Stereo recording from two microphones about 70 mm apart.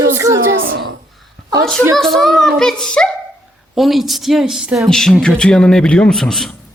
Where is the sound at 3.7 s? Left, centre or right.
Centre.